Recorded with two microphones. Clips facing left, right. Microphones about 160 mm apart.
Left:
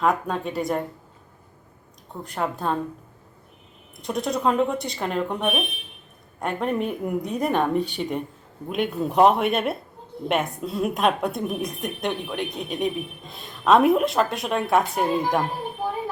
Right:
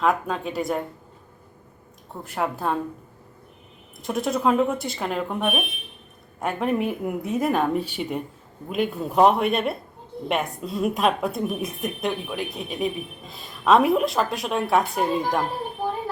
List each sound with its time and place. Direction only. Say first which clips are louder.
0.0 s a woman's voice: even; centre (ahead or behind)
2.2 s a woman's voice: right 1 dB; 5° right (ahead or behind)
4.0 s a woman's voice: right 1 dB; centre (ahead or behind)